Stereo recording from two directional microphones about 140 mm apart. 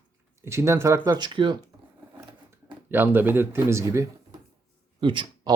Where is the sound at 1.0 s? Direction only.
30° right (ahead or behind).